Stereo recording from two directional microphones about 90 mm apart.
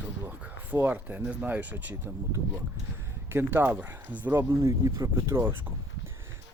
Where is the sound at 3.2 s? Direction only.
25° right (ahead or behind).